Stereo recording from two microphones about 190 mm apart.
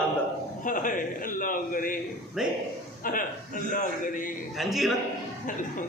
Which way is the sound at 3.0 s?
45° left (ahead or behind).